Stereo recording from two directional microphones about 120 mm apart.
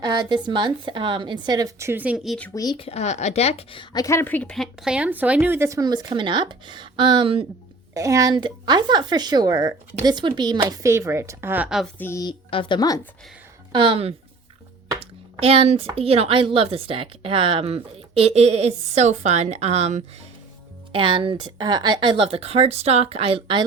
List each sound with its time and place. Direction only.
0.0 s a sound: 35° right (ahead or behind)
0.4 s speech: 40° right (ahead or behind); by 2.4 s 5° right (ahead or behind)
2.7 s a woman's voice: 60° left (ahead or behind)
3.9 s speech: 25° left (ahead or behind)
4.5 s speech: centre (ahead or behind); by 7.4 s 45° right (ahead or behind)
7.9 s speech: 25° right (ahead or behind)
10.8 s speech: 25° right (ahead or behind)
11.9 s a woman's voice: 20° left (ahead or behind)
12.5 s speech: 45° left (ahead or behind)
13.7 s speech: 50° right (ahead or behind); by 20.1 s 65° right (ahead or behind)
20.9 s speech: 45° right (ahead or behind)
22.2 s speech: 55° right (ahead or behind)